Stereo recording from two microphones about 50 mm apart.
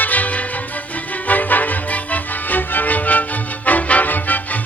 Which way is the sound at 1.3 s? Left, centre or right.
Left.